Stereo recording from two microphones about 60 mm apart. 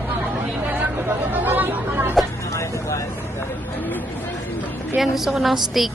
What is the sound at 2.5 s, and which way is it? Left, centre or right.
Vehicle, left.